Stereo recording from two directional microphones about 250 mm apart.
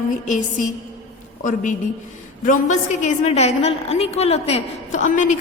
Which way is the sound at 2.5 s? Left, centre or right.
Left.